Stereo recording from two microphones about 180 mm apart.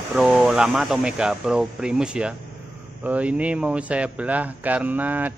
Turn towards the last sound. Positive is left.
turn(degrees=-10)  # may be behind; listen again after turning